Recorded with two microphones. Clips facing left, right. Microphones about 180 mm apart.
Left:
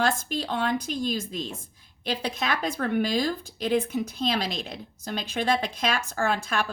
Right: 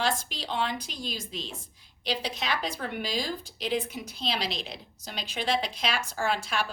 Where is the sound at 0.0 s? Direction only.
50° left (ahead or behind).